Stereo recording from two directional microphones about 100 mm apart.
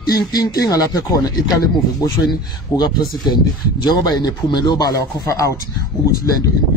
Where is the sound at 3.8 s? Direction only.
40° left (ahead or behind).